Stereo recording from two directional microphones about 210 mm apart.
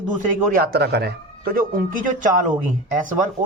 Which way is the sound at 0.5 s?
45° right (ahead or behind).